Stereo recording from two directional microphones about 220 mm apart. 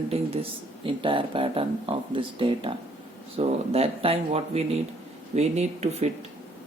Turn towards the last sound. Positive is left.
turn(degrees=-30)  # may be behind; listen again after turning